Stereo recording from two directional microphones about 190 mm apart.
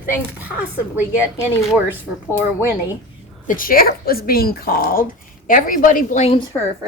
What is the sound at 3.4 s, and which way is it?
Speech, 50° left (ahead or behind).